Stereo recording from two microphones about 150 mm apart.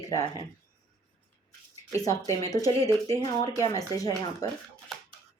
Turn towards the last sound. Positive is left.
turn(degrees=25)  # may be behind; listen again after turning